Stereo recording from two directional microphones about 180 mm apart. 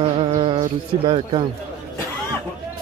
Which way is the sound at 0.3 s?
30° right (ahead or behind).